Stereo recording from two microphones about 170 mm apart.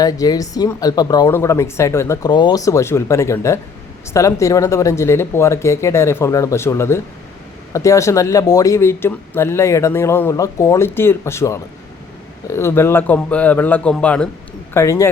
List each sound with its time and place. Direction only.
0.0 s speech: 20° left (ahead or behind)
14.7 s speech: 15° left (ahead or behind)